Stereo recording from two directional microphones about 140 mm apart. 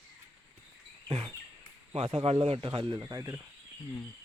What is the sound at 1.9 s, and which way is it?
Speech, 45° right (ahead or behind).